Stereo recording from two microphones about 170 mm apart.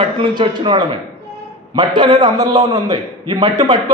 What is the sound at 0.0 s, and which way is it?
A man's voice, 25° right (ahead or behind).